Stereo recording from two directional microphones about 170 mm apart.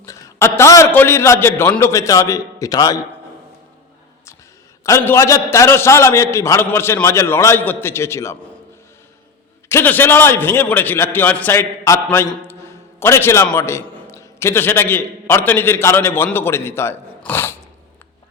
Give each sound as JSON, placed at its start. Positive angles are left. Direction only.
{"t": 0.0, "sound": "a man's voice", "side_deg": 15}
{"t": 4.9, "sound": "a man's voice", "side_deg": 15}
{"t": 9.6, "sound": "a man's voice", "side_deg": 15}